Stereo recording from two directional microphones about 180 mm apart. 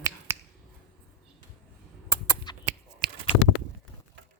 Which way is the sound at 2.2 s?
15° left (ahead or behind).